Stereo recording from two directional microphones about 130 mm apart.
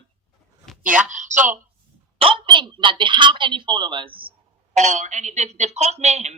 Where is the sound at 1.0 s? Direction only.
75° right (ahead or behind).